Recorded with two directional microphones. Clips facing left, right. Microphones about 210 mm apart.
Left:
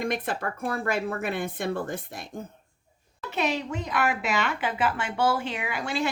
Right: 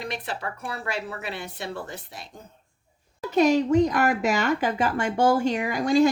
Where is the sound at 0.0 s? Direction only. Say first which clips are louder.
Left 4 dB; 50° left (ahead or behind).